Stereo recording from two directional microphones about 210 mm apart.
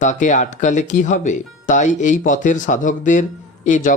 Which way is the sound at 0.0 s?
35° left (ahead or behind).